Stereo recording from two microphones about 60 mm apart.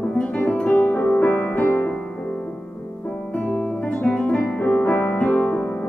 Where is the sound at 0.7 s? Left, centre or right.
Left.